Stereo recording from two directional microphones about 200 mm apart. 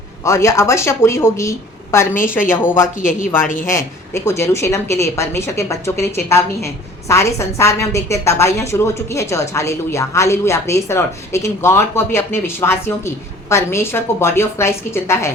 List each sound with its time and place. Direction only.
0.3 s a woman's voice: 15° left (ahead or behind)
3.0 s speech: 40° left (ahead or behind)
3.7 s a woman's voice: 15° left (ahead or behind)